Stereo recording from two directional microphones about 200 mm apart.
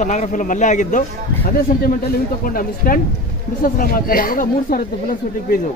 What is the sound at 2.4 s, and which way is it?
A man's voice, 45° left (ahead or behind).